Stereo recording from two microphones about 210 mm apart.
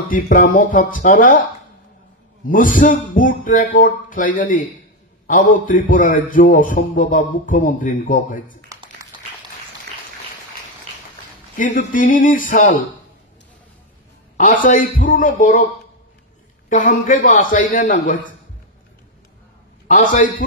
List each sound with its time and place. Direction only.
0.1 s a man's voice: 40° left (ahead or behind)
2.4 s a man's voice: 40° left (ahead or behind)
9.1 s applause: 20° right (ahead or behind)
11.9 s a man's voice: 40° left (ahead or behind)
14.3 s a man's voice: 40° left (ahead or behind)
16.6 s a man's voice: 40° left (ahead or behind)